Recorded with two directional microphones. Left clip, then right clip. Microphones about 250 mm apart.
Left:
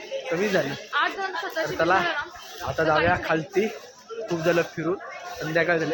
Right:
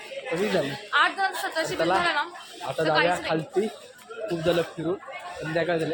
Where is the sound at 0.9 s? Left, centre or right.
Right.